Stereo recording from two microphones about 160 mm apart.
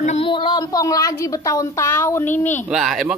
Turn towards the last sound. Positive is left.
turn(degrees=-5)  # may be behind; listen again after turning